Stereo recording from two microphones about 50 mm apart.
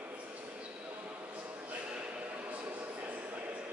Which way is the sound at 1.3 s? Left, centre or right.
Right.